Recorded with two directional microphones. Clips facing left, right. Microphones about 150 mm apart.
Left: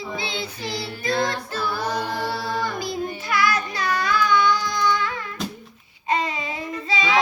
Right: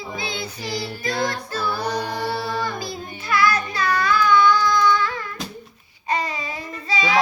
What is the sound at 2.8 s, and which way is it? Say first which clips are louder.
Child singing: left 4 dB; 20° left (ahead or behind).